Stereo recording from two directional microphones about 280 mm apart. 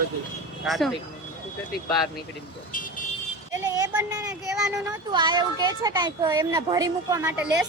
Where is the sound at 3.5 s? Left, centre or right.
Centre.